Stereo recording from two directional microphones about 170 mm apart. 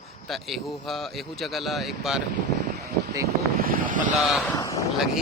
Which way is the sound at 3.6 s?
55° right (ahead or behind).